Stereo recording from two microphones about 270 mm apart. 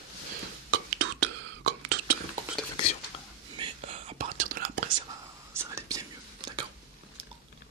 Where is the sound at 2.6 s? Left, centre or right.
Centre.